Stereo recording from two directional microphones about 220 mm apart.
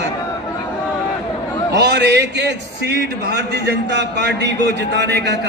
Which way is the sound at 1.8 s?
50° right (ahead or behind).